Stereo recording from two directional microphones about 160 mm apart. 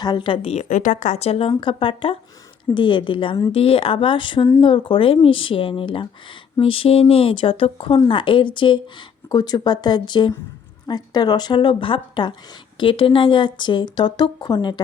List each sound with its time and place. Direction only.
0.0 s speech: 30° left (ahead or behind)